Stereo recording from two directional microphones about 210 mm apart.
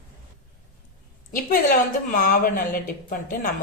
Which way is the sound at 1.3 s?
40° left (ahead or behind).